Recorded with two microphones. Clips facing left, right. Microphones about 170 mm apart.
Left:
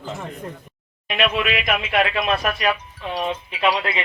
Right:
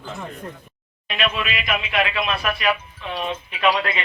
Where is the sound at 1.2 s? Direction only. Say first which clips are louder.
Left 4 dB; 60° left (ahead or behind); by 2.7 s 45° left (ahead or behind).